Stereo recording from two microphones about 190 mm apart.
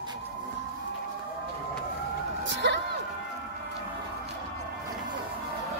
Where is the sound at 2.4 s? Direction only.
65° right (ahead or behind).